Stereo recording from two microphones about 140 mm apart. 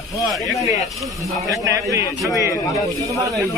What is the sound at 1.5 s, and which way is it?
Speech, 25° right (ahead or behind).